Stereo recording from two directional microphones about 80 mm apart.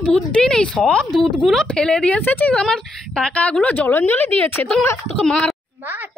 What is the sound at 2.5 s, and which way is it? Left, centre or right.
A woman's voice, centre.